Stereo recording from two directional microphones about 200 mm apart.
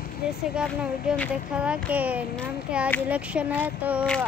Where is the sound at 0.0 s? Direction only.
50° left (ahead or behind).